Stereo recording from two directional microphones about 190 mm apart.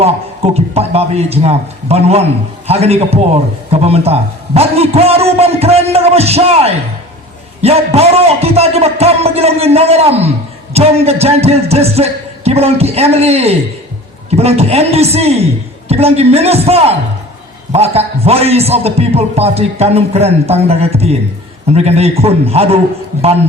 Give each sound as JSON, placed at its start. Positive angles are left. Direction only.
{"t": 0.5, "sound": "a man's voice", "side_deg": -30}